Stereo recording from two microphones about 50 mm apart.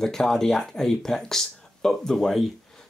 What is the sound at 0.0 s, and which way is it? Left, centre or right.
Speech, centre.